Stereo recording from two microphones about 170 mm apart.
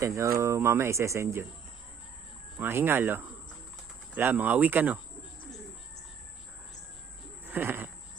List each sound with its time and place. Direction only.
0.0 s speech: 15° right (ahead or behind)
2.6 s speech: 10° right (ahead or behind)
7.4 s a sound: 10° right (ahead or behind)